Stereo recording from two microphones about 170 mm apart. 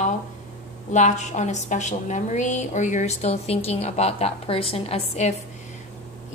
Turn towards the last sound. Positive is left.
turn(degrees=40)  # may be behind; listen again after turning